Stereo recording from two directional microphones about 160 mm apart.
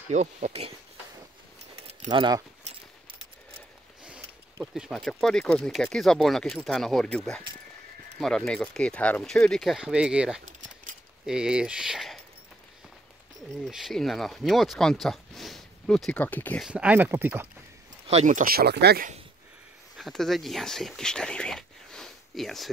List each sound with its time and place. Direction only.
0.1 s speech: 45° right (ahead or behind)
2.0 s speech: 25° right (ahead or behind)
4.7 s speech: centre (ahead or behind)
13.7 s speech: centre (ahead or behind)
16.6 s speech: 10° right (ahead or behind)
18.0 s speech: 50° right (ahead or behind); by 19.0 s 90° right
20.0 s speech: centre (ahead or behind)